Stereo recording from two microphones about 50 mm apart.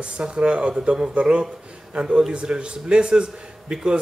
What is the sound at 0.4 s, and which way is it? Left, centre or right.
A man's voice, centre.